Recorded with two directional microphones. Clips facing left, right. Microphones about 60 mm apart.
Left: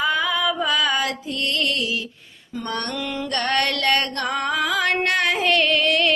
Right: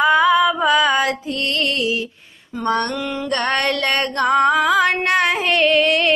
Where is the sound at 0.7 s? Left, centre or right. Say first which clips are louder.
Right 6 dB; right.